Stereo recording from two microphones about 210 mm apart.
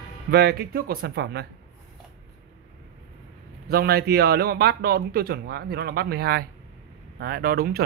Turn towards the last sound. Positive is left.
turn(degrees=-45)  # may be behind; listen again after turning